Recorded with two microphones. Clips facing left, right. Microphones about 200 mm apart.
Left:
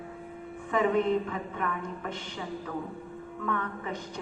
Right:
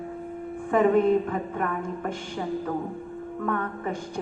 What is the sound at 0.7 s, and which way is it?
A woman's voice, 50° right (ahead or behind).